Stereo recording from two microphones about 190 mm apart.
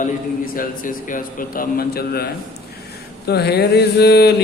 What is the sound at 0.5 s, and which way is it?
A man's voice, 45° left (ahead or behind).